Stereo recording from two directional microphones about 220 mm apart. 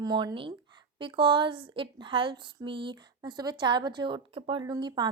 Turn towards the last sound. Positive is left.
turn(degrees=-20)  # may be behind; listen again after turning